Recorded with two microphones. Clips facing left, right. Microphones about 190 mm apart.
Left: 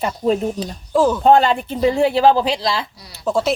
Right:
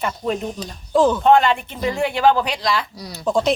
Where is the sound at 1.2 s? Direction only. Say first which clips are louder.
Left 2 dB; 35° left (ahead or behind).